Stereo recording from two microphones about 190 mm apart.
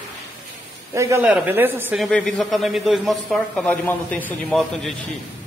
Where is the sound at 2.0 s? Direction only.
5° left (ahead or behind).